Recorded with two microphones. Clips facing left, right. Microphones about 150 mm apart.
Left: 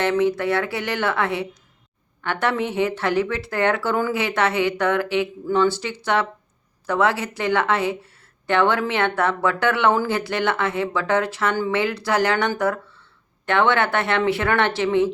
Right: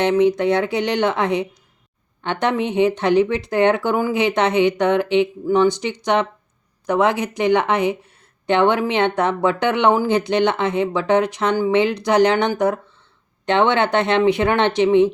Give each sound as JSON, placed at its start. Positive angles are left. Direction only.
{"t": 0.0, "sound": "a woman's voice", "side_deg": -20}